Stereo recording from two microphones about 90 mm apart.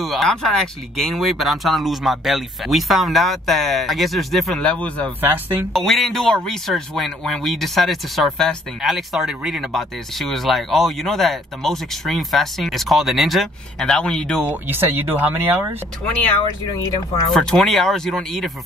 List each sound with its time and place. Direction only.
0.0 s speech: centre (ahead or behind)
4.6 s a man's voice: 15° left (ahead or behind)
5.2 s speech: 25° right (ahead or behind)
5.7 s speech: centre (ahead or behind)
14.5 s speech: 25° right (ahead or behind)
17.3 s speech: 5° left (ahead or behind)